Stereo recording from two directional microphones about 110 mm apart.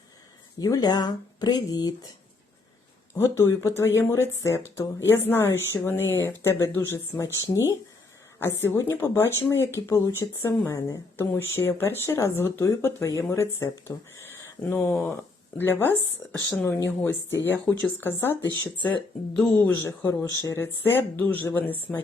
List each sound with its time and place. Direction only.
0.6 s speech: 35° left (ahead or behind)
3.2 s speech: 25° left (ahead or behind)
19.4 s speech: 10° left (ahead or behind)